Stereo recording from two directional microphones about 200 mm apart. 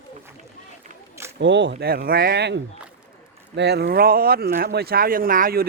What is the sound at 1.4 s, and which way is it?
Speech, 60° right (ahead or behind).